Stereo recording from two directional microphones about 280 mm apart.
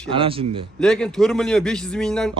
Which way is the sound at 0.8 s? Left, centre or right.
Centre.